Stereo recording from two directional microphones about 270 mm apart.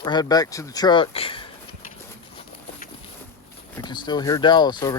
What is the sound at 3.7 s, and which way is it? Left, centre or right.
Speech, centre.